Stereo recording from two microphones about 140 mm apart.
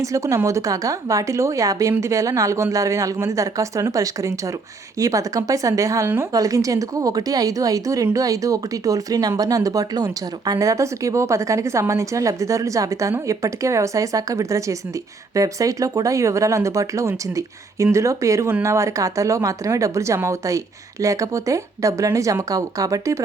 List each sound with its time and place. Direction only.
0.0 s a woman's voice: 25° right (ahead or behind)